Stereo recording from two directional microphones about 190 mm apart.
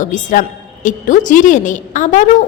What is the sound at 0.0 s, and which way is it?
A woman's voice, 40° left (ahead or behind).